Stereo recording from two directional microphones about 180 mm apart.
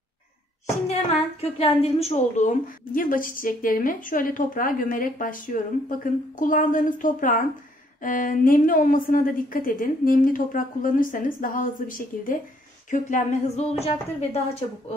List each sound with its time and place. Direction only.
0.8 s a woman's voice: 35° left (ahead or behind)